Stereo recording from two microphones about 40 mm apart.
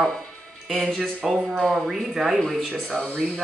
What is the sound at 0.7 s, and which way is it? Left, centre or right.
Music, centre.